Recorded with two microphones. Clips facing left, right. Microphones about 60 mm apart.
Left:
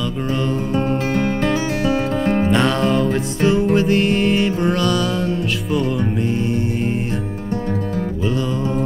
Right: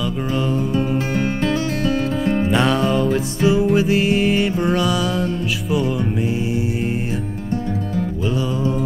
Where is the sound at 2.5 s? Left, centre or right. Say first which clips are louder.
Left 1 dB; centre.